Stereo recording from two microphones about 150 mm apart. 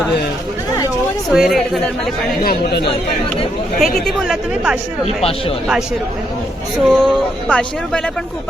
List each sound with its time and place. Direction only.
1.3 s speech: centre (ahead or behind)
2.4 s speech: 85° left
3.8 s speech: centre (ahead or behind)
5.0 s speech: 40° left (ahead or behind)
6.8 s speech: 5° left (ahead or behind)